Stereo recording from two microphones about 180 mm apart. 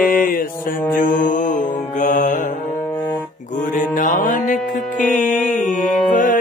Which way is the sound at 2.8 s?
25° left (ahead or behind).